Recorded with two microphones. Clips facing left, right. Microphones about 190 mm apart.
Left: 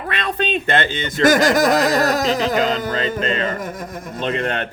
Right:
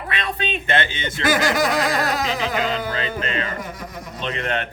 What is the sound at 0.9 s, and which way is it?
Speech, 40° left (ahead or behind).